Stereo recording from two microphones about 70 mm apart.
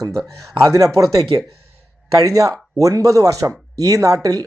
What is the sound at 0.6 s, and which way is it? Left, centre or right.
Speech, right.